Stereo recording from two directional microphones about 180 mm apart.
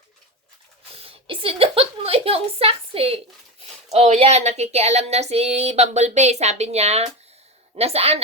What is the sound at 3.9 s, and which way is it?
Speech, 35° right (ahead or behind).